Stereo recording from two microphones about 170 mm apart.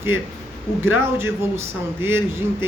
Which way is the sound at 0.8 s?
15° right (ahead or behind).